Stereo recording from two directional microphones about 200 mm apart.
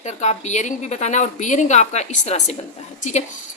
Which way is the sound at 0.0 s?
35° left (ahead or behind).